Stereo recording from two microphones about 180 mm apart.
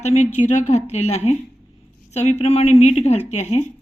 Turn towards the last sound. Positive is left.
turn(degrees=40)  # may be behind; listen again after turning